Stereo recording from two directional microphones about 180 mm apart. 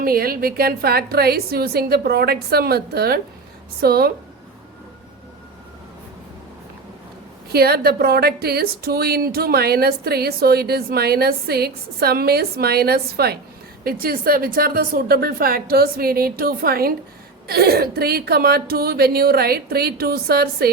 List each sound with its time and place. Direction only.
0.0 s speech: 55° right (ahead or behind)
7.5 s speech: 60° right (ahead or behind)